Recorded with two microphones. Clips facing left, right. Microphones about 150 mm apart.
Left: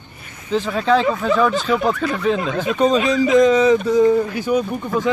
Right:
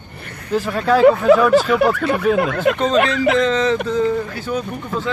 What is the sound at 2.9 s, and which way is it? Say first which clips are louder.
Speech: left 1 dB; 70° right (ahead or behind).